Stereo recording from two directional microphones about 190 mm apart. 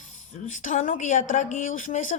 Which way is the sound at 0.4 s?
40° left (ahead or behind).